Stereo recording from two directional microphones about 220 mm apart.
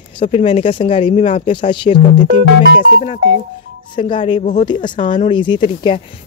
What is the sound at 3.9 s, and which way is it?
Speech, 25° left (ahead or behind).